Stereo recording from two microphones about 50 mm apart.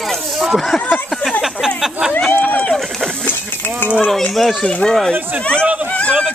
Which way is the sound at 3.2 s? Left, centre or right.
Left.